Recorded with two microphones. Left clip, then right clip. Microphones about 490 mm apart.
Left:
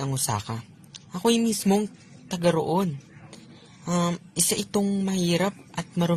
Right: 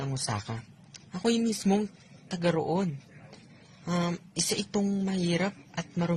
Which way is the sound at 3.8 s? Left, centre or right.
Right.